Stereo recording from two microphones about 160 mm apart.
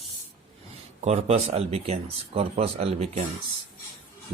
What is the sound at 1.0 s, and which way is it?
Speech, 40° right (ahead or behind).